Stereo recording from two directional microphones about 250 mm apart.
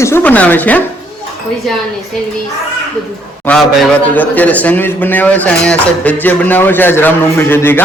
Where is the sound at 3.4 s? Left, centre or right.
Centre.